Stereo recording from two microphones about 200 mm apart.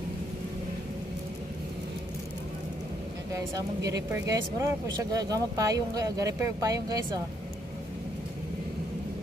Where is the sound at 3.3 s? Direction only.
15° right (ahead or behind).